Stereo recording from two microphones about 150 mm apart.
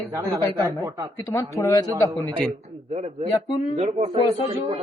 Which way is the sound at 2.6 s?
50° right (ahead or behind).